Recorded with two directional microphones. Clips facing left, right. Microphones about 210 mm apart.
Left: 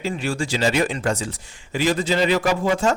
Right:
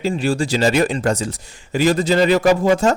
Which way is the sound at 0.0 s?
35° right (ahead or behind).